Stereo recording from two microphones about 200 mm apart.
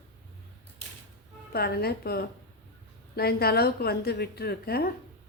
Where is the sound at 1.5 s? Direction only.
50° left (ahead or behind).